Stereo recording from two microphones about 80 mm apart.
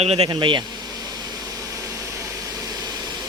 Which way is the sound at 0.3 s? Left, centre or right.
Right.